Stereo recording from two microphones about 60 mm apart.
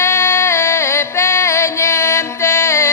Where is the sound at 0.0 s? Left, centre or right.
Left.